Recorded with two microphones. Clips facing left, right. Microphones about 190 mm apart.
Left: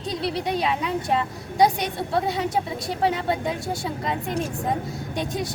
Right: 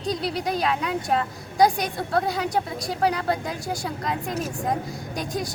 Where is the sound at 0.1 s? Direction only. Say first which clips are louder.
Even; centre (ahead or behind).